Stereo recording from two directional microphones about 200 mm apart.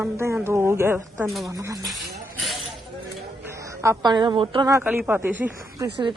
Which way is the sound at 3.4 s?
15° right (ahead or behind).